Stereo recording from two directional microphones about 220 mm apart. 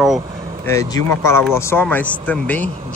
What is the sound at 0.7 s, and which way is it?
Speech, 15° left (ahead or behind).